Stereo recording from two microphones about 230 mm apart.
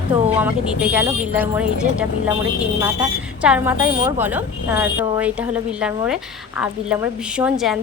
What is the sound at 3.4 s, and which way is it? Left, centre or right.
A woman's voice, centre.